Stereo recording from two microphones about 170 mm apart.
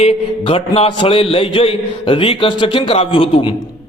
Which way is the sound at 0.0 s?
35° left (ahead or behind).